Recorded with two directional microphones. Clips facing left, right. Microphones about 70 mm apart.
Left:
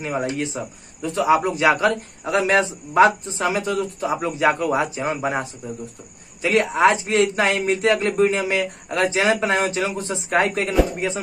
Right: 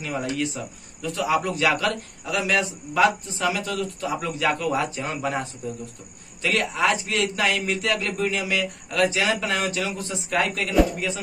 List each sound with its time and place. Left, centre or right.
0.0 s speech: left